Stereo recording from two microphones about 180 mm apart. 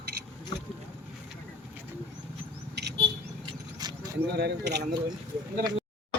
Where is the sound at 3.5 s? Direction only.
20° right (ahead or behind).